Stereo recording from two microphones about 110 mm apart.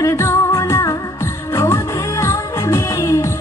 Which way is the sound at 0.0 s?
25° left (ahead or behind).